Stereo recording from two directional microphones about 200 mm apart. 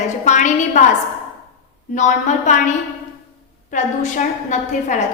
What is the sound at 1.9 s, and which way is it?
A woman's voice, 40° left (ahead or behind).